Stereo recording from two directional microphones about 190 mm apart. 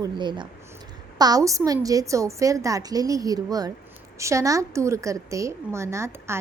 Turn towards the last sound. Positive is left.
turn(degrees=-15)  # may be behind; listen again after turning